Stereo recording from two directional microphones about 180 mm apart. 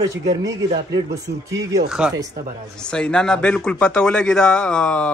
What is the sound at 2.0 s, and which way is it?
Speech, 5° right (ahead or behind).